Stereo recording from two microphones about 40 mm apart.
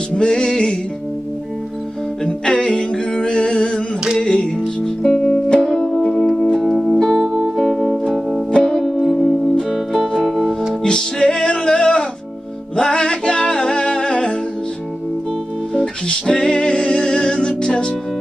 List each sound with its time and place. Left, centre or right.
0.1 s music: centre
2.2 s music: left
5.9 s music: centre
8.5 s music: left
8.8 s music: centre
10.1 s music: centre
10.7 s music: centre
15.8 s music: centre